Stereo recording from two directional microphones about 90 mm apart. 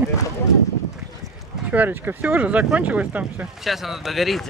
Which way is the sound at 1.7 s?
20° right (ahead or behind).